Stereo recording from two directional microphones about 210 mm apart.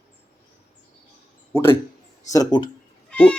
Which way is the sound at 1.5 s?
10° left (ahead or behind).